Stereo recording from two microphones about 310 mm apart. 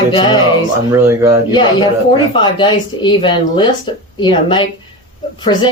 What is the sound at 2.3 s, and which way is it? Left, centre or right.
Speech, centre.